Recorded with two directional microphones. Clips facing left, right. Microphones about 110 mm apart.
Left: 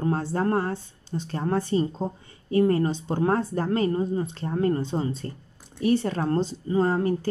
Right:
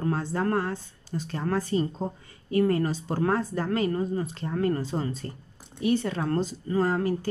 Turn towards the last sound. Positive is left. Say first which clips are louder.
# left 2 dB
turn(degrees=30)  # may be behind; listen again after turning